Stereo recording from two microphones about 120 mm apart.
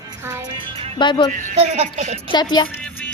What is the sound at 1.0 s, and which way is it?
Music, 40° left (ahead or behind).